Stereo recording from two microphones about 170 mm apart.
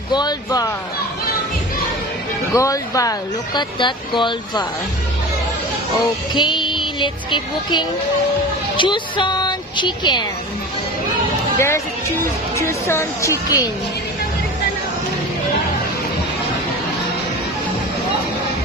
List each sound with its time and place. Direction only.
0.1 s speech: 25° left (ahead or behind)
2.5 s speech: 20° left (ahead or behind)
6.3 s speech: 25° left (ahead or behind)
11.5 s a woman's voice: 15° left (ahead or behind)